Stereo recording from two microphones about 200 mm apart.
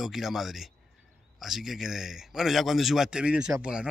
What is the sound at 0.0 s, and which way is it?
A man's voice, centre (ahead or behind).